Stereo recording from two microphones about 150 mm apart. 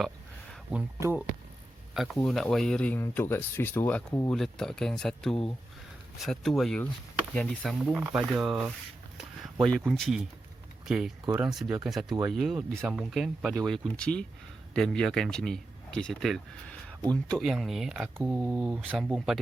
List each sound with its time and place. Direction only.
0.9 s speech: 20° right (ahead or behind)
1.9 s speech: centre (ahead or behind)
9.8 s speech: centre (ahead or behind)